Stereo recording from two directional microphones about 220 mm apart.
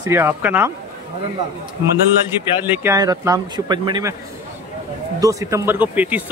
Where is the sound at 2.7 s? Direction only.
10° right (ahead or behind).